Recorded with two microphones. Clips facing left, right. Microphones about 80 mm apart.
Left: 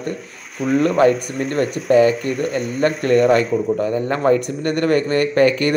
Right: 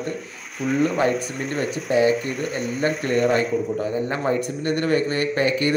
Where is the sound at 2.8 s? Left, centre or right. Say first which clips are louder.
Left 6 dB; left.